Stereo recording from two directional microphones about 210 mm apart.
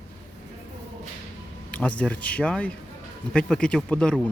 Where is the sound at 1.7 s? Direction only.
5° left (ahead or behind).